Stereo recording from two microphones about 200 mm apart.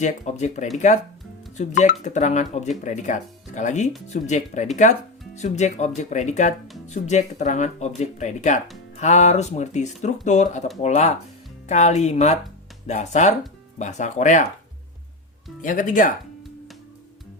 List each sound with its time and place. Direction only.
0.0 s speech: 35° left (ahead or behind)
15.6 s speech: 40° left (ahead or behind)